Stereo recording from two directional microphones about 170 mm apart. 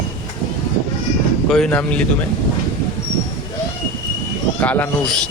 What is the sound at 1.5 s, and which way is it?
Speech, 5° left (ahead or behind).